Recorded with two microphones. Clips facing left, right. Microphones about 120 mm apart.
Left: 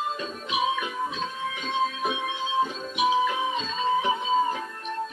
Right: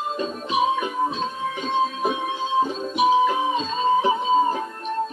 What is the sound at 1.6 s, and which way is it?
Music, 35° right (ahead or behind).